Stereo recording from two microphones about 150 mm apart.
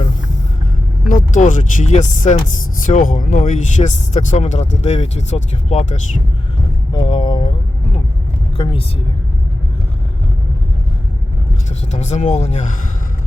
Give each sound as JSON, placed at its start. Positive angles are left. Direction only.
{"t": 1.0, "sound": "speech", "side_deg": 60}
{"t": 6.9, "sound": "a sound", "side_deg": 35}
{"t": 8.5, "sound": "a woman's voice", "side_deg": 35}
{"t": 11.9, "sound": "speech", "side_deg": 50}